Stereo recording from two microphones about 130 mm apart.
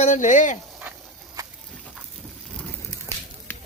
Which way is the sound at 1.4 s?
25° right (ahead or behind).